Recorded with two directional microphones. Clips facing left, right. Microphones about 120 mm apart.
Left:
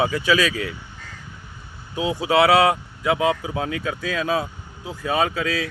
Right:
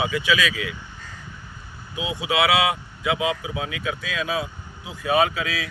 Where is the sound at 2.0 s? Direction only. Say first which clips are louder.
Left 5 dB; 40° left (ahead or behind).